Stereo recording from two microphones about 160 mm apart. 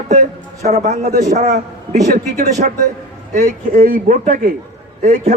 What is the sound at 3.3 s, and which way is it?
A man's voice, 70° right (ahead or behind).